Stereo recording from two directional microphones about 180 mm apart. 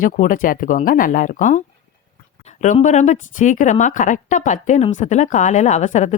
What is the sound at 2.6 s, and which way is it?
Speech, 40° left (ahead or behind).